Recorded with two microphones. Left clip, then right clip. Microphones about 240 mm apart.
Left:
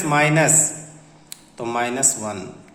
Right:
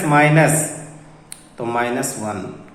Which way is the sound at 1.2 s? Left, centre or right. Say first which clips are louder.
Right 3 dB; centre.